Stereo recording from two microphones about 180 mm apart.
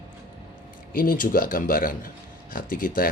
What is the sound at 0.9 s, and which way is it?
Speech, 50° left (ahead or behind).